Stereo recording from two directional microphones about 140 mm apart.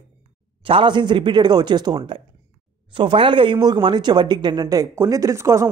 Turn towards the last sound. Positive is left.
turn(degrees=-20)  # may be behind; listen again after turning